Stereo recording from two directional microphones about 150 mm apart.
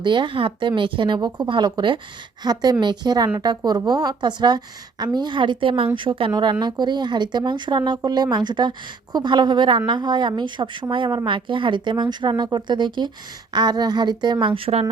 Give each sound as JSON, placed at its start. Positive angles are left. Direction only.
{"t": 0.0, "sound": "a woman's voice", "side_deg": -30}